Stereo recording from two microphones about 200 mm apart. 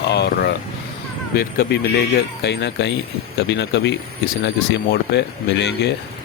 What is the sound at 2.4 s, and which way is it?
Speech, 60° left (ahead or behind).